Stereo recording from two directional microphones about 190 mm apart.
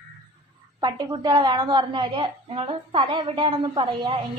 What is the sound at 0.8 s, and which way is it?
A woman's voice, 20° right (ahead or behind).